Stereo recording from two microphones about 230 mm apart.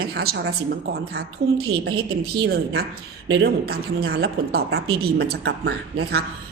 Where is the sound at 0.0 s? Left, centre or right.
Right.